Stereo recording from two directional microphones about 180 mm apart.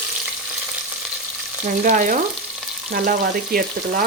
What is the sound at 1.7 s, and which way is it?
Speech, 45° right (ahead or behind).